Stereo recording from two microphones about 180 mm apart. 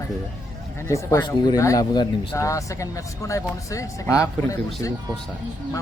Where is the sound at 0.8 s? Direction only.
15° left (ahead or behind).